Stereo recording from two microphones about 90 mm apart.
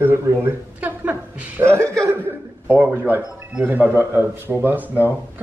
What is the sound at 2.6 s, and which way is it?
Speech, 20° right (ahead or behind).